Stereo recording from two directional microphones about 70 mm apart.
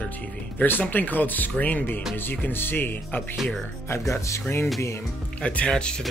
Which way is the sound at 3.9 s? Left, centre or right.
Left.